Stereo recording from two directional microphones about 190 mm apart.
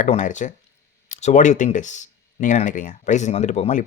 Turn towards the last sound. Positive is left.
turn(degrees=35)  # may be behind; listen again after turning